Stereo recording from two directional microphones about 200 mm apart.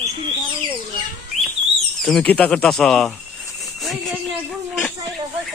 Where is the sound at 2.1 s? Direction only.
5° left (ahead or behind).